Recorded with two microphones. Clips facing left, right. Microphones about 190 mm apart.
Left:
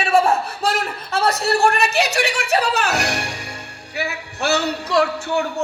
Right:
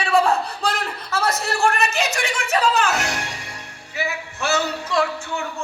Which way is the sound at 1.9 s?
70° left (ahead or behind).